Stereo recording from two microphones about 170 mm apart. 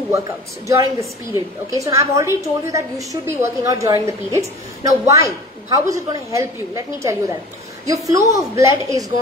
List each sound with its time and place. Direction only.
0.7 s a woman's voice: 20° right (ahead or behind)